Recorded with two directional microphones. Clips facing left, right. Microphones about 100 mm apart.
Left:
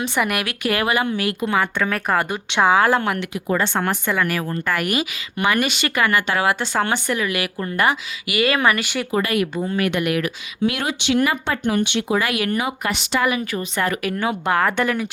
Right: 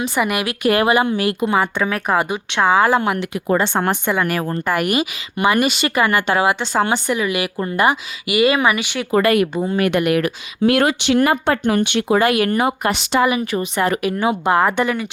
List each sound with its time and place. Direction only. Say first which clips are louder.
0.0 s a woman's voice: right 2 dB; centre (ahead or behind)
0.7 s a woman's voice: right 5 dB; 20° right (ahead or behind); by 2.4 s 5° right (ahead or behind)
2.5 s a woman's voice: even; 10° left (ahead or behind)
2.7 s a woman's voice: right 2 dB; 5° right (ahead or behind)
9.1 s speech: right 6 dB; 55° right (ahead or behind)
9.6 s a woman's voice: right 3 dB; 30° right (ahead or behind)
9.8 s speech: right 5 dB; 45° right (ahead or behind)
13.1 s a woman's voice: right 3 dB; 25° right (ahead or behind)